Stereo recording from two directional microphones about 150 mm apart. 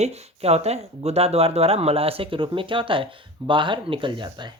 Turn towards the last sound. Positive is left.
turn(degrees=-30)  # may be behind; listen again after turning